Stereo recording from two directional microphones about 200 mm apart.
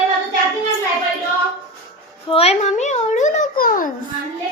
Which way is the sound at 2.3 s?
30° left (ahead or behind).